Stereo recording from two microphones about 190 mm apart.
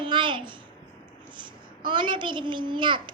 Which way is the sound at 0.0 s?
25° right (ahead or behind).